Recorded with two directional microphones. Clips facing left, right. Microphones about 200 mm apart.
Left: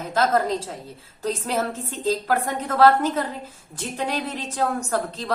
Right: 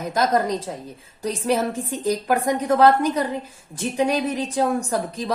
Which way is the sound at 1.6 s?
15° right (ahead or behind).